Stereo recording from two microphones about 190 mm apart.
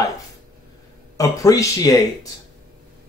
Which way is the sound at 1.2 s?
15° left (ahead or behind).